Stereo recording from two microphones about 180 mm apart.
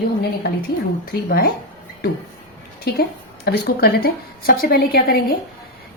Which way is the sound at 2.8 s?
60° left (ahead or behind).